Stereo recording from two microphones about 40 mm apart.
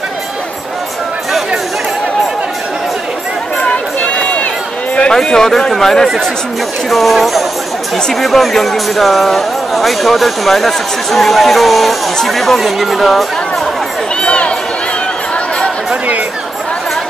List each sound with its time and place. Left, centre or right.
3.7 s run: left
5.1 s speech: centre
14.2 s run: left